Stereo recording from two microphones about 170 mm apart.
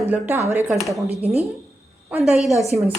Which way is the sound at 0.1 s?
15° right (ahead or behind).